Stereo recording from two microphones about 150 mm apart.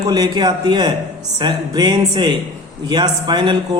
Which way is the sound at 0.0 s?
25° right (ahead or behind).